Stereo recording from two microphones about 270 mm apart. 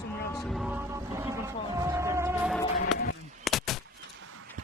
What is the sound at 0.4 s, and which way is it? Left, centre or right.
Music, centre.